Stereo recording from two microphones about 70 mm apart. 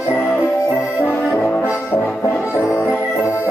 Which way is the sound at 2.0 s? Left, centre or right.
Centre.